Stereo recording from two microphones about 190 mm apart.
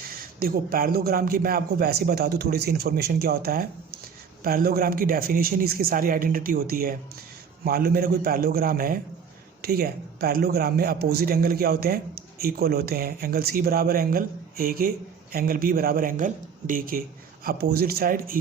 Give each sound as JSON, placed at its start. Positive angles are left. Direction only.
{"t": 0.1, "sound": "speech", "side_deg": -50}